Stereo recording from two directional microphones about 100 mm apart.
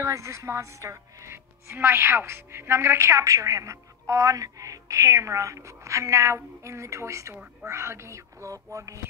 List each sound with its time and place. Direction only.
0.0 s a woman's voice: 30° right (ahead or behind)